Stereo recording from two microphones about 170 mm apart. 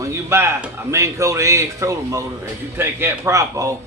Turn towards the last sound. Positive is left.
turn(degrees=-20)  # may be behind; listen again after turning